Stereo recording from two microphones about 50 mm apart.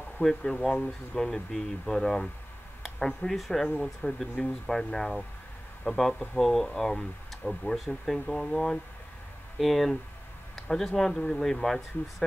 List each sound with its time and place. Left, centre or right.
0.2 s speech: centre
3.3 s speech: centre